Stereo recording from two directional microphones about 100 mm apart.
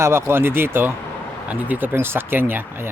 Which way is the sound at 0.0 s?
25° right (ahead or behind).